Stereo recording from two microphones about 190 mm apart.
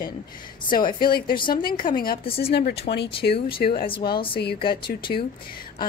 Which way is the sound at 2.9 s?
60° left (ahead or behind).